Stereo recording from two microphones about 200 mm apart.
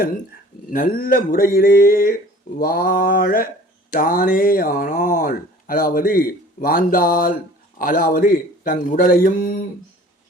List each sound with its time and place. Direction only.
0.7 s speech: 45° left (ahead or behind)